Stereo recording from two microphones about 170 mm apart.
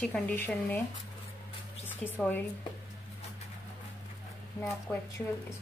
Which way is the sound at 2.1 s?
10° left (ahead or behind).